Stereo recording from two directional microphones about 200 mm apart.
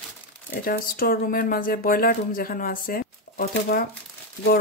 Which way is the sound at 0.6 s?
45° left (ahead or behind).